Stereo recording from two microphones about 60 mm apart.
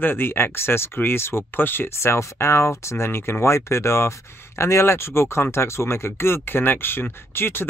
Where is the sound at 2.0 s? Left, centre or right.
Left.